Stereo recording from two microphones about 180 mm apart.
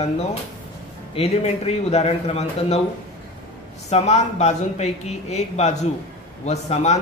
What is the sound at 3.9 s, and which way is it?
Speech, 40° left (ahead or behind).